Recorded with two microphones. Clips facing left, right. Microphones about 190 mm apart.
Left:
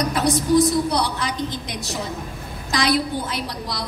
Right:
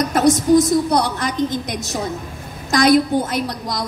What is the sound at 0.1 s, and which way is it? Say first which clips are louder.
A woman's voice: right 6 dB; 45° right (ahead or behind).